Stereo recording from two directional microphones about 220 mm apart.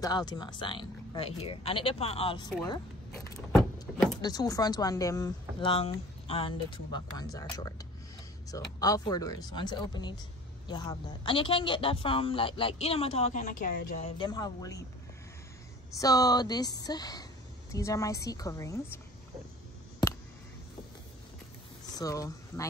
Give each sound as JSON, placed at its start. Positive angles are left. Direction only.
{"t": 0.0, "sound": "a man's voice", "side_deg": 20}
{"t": 3.8, "sound": "a man's voice", "side_deg": 15}
{"t": 16.0, "sound": "speech", "side_deg": 15}
{"t": 21.9, "sound": "speech", "side_deg": 15}